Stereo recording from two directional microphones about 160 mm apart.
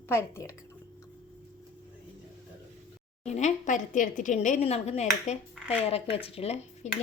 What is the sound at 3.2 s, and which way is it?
A woman's voice, 45° left (ahead or behind).